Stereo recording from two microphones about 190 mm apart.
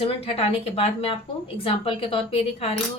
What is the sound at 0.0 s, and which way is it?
A woman's voice, 30° left (ahead or behind).